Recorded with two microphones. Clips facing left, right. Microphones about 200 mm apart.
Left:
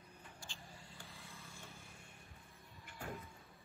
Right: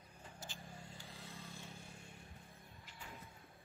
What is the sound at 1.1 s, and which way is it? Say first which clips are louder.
Vehicle: right 4 dB; 30° right (ahead or behind).